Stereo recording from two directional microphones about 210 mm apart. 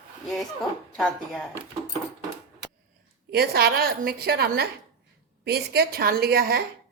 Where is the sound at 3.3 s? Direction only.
50° right (ahead or behind).